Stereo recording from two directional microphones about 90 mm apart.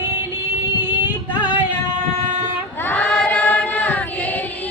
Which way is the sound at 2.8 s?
15° left (ahead or behind).